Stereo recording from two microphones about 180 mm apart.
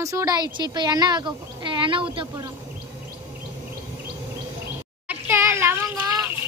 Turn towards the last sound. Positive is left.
turn(degrees=-15)  # may be behind; listen again after turning